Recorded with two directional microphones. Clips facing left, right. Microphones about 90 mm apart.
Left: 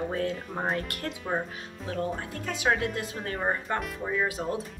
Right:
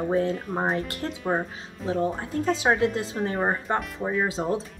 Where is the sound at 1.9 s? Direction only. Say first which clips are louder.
Right 6 dB; 25° right (ahead or behind).